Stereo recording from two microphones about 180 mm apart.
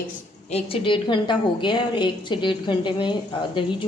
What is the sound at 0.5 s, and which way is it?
A woman's voice, 30° left (ahead or behind).